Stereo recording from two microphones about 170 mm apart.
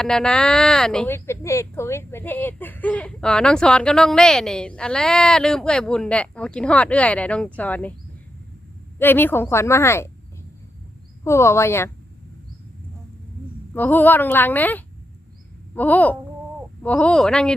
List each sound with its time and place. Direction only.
0.0 s speech: 5° left (ahead or behind)
9.0 s speech: 10° left (ahead or behind)
11.2 s speech: 15° left (ahead or behind)
13.7 s speech: 10° left (ahead or behind)